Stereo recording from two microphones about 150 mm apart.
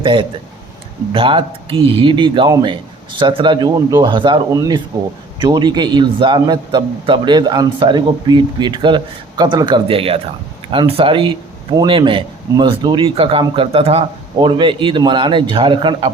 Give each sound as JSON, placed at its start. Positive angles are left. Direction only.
{"t": 0.0, "sound": "a man's voice", "side_deg": -35}